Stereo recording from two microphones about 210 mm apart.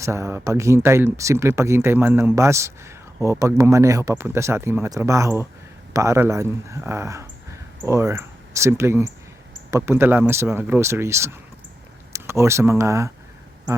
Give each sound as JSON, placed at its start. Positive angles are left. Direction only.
{"t": 0.0, "sound": "speech", "side_deg": -15}